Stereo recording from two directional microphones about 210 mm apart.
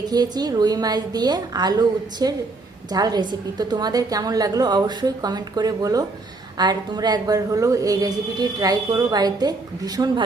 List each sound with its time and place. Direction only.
0.0 s a woman's voice: 20° right (ahead or behind)